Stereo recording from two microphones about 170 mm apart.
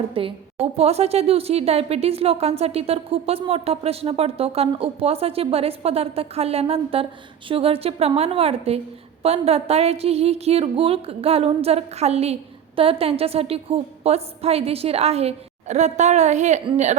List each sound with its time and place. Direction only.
0.1 s speech: 30° right (ahead or behind)